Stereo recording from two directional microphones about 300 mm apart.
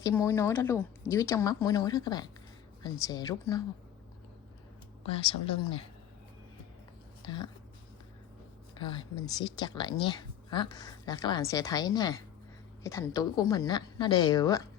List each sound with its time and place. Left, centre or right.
0.0 s a woman's voice: centre
5.0 s a woman's voice: centre
7.2 s speech: centre
8.8 s a woman's voice: centre